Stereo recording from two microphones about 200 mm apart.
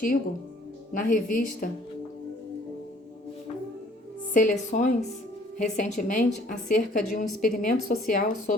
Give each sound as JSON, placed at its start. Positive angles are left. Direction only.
{"t": 0.9, "sound": "a woman's voice", "side_deg": 40}
{"t": 4.4, "sound": "a woman's voice", "side_deg": 40}